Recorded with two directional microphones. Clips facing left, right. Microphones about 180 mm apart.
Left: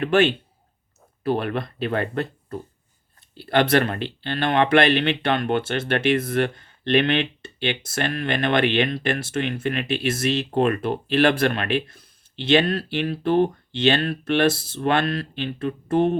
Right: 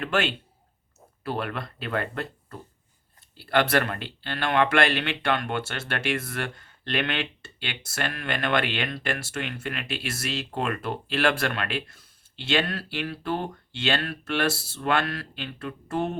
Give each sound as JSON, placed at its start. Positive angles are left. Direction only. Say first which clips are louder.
{"t": 0.0, "sound": "speech", "louder": "left 8 dB", "side_deg": 15}
{"t": 3.3, "sound": "speech", "louder": "left 4 dB", "side_deg": 20}